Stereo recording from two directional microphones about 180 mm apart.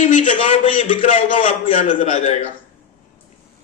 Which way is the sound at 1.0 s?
45° left (ahead or behind).